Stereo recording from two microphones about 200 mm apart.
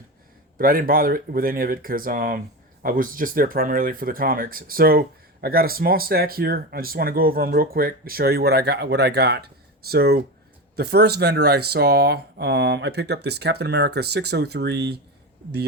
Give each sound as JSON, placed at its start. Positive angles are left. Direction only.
{"t": 0.6, "sound": "speech", "side_deg": -45}